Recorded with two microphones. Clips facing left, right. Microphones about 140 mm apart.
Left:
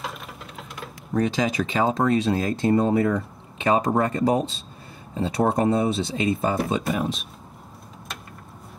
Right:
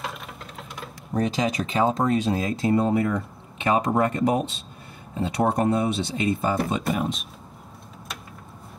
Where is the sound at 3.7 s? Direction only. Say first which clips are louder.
Even; 30° left (ahead or behind).